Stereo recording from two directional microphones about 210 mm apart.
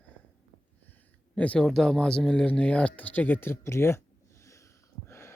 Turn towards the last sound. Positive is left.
turn(degrees=10)  # may be behind; listen again after turning